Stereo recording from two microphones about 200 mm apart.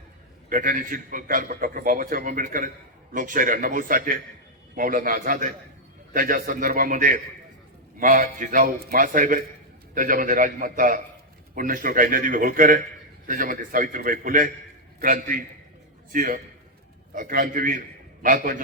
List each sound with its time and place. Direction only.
0.5 s a man's voice: 40° right (ahead or behind)